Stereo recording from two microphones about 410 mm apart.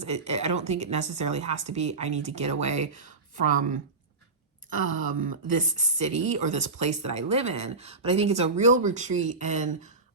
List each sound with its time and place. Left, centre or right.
0.0 s speech: centre
5.5 s speech: centre